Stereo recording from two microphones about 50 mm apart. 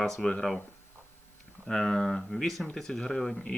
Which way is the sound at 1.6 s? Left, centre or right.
Centre.